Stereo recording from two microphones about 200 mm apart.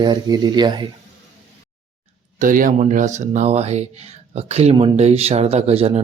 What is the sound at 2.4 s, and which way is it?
Speech, 40° right (ahead or behind).